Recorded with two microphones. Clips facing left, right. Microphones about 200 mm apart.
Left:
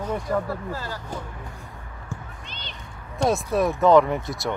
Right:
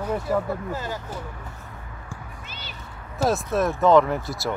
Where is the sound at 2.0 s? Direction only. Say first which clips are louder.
Left 5 dB; 5° right (ahead or behind).